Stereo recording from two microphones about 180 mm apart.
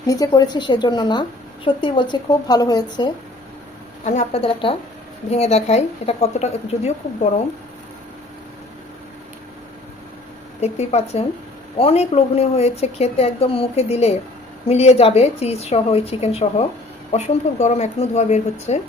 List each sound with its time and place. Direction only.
0.1 s a woman's voice: 20° left (ahead or behind)
4.0 s speech: 40° left (ahead or behind)
10.6 s speech: 35° left (ahead or behind)